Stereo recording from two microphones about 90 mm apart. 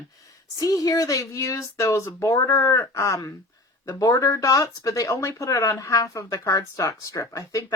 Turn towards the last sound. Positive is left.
turn(degrees=35)  # may be behind; listen again after turning